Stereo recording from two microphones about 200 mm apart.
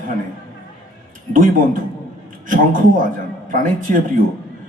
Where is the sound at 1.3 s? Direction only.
45° right (ahead or behind).